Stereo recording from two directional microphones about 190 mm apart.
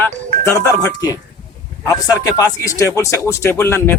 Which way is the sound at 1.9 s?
20° left (ahead or behind).